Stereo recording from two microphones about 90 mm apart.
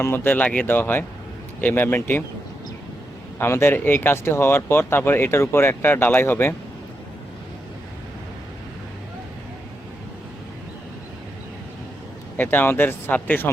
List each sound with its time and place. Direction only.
0.0 s speech: 20° left (ahead or behind)
3.3 s speech: 25° left (ahead or behind)
12.4 s speech: 20° left (ahead or behind)